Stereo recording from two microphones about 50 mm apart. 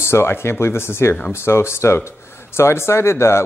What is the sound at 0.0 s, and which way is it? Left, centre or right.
Speech, left.